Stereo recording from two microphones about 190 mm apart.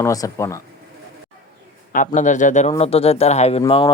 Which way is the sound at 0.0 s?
15° left (ahead or behind).